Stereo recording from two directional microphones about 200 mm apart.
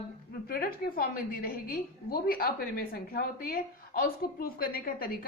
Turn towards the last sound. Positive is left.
turn(degrees=45)  # may be behind; listen again after turning